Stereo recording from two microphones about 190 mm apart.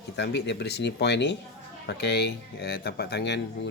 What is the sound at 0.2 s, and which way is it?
Speech, 65° left (ahead or behind).